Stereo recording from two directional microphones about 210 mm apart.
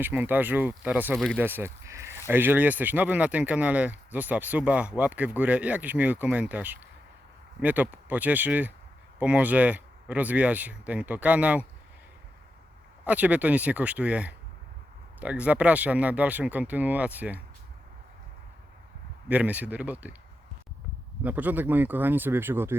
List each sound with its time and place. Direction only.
0.0 s speech: 10° right (ahead or behind)
13.1 s speech: 5° right (ahead or behind)
19.3 s speech: 5° right (ahead or behind)
21.2 s speech: 10° right (ahead or behind)